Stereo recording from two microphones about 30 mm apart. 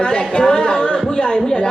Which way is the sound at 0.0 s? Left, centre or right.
Left.